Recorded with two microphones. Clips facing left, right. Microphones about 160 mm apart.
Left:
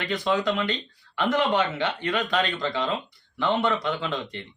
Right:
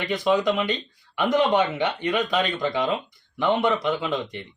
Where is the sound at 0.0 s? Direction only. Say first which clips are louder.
Right 3 dB; 10° right (ahead or behind).